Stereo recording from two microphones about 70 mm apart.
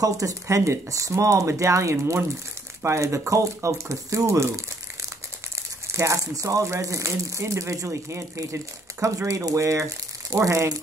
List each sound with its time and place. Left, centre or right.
0.0 s speech: right
5.9 s speech: right